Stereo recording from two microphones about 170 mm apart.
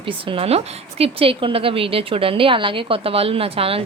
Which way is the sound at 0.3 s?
35° right (ahead or behind).